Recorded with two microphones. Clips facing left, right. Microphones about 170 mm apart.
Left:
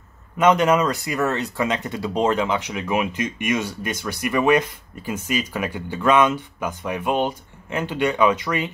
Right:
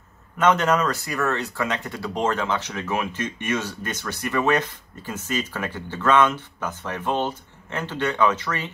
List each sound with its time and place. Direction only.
0.4 s speech: 10° left (ahead or behind)